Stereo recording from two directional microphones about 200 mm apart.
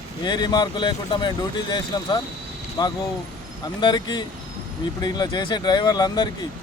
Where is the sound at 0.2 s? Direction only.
20° left (ahead or behind).